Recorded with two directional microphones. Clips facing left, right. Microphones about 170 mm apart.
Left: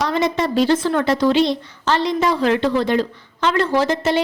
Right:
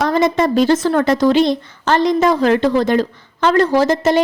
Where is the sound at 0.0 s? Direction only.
50° right (ahead or behind).